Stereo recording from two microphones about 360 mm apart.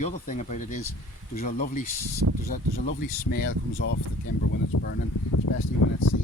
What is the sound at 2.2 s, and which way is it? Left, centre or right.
Speech, right.